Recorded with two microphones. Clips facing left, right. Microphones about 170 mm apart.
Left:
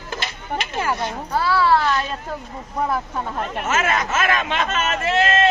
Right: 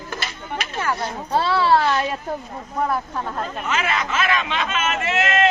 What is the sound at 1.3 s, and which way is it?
Speech, 25° right (ahead or behind).